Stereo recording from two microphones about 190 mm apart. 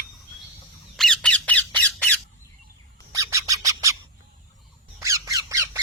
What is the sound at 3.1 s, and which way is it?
Bird, 15° right (ahead or behind).